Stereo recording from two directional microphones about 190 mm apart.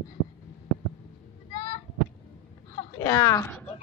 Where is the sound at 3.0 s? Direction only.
15° left (ahead or behind).